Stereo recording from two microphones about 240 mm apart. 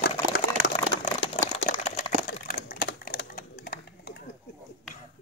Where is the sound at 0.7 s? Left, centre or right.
Left.